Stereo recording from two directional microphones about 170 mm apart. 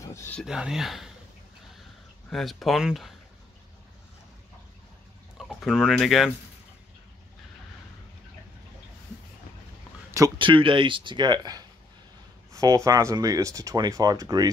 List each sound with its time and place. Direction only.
0.0 s a sound: 15° left (ahead or behind)
0.4 s speech: 5° right (ahead or behind)
2.3 s speech: centre (ahead or behind)
5.4 s speech: centre (ahead or behind)
10.1 s speech: 25° right (ahead or behind)